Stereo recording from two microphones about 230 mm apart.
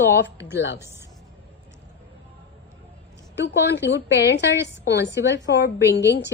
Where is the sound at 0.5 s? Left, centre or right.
Left.